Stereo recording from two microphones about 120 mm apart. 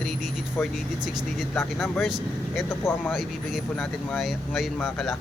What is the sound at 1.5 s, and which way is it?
Speech, 15° left (ahead or behind).